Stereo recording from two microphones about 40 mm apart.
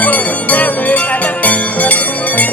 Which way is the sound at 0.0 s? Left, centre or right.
Left.